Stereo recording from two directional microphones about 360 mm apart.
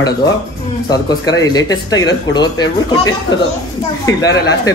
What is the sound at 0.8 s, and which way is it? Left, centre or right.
A man's voice, centre.